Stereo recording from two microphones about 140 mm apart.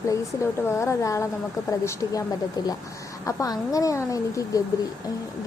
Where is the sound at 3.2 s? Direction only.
25° left (ahead or behind).